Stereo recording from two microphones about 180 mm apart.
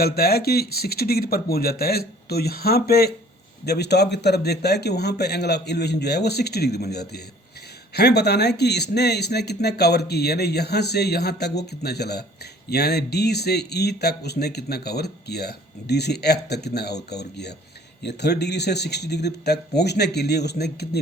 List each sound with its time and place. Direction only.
0.0 s speech: 60° left (ahead or behind)